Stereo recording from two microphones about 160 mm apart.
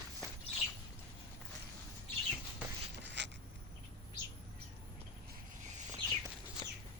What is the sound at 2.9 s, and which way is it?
Writing, 90° right.